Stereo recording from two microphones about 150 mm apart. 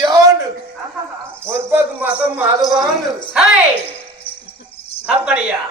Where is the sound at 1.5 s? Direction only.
15° right (ahead or behind).